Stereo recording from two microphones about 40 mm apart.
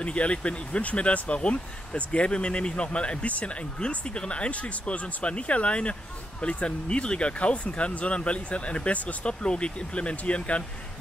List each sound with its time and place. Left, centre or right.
0.0 s speech: left